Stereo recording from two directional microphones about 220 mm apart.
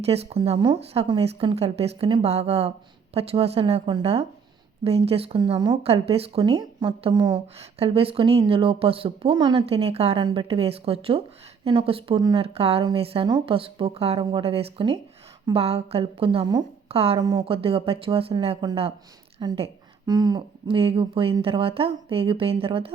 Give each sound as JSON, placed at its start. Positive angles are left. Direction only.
{"t": 0.0, "sound": "a woman's voice", "side_deg": -30}